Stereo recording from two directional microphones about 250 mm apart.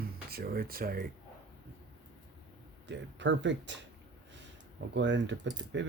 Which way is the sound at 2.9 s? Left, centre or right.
Right.